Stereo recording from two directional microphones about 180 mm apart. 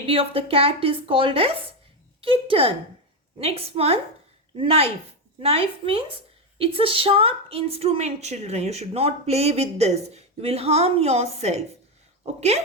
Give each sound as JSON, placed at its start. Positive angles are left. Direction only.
{"t": 0.1, "sound": "a woman's voice", "side_deg": -30}